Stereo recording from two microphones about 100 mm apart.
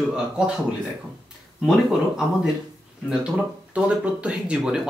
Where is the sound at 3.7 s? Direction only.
10° right (ahead or behind).